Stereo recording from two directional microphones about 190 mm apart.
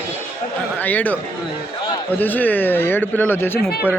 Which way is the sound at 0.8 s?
10° left (ahead or behind).